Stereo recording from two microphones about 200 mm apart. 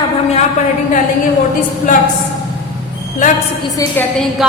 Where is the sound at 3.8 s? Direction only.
15° left (ahead or behind).